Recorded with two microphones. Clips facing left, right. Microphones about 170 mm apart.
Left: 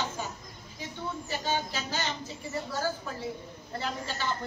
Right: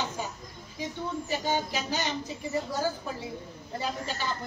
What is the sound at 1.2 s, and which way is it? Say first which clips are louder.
Speech: right 2 dB; 15° right (ahead or behind).